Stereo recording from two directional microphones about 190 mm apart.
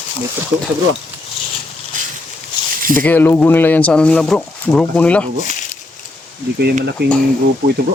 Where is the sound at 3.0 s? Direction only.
10° left (ahead or behind).